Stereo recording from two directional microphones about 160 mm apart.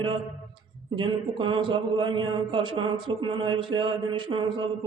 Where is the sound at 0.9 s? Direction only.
30° right (ahead or behind).